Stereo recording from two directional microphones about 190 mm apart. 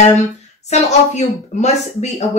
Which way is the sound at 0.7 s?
35° left (ahead or behind).